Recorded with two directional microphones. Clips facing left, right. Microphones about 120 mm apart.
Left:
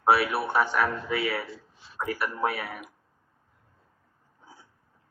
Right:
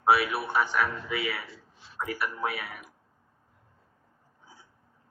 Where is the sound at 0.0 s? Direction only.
30° left (ahead or behind).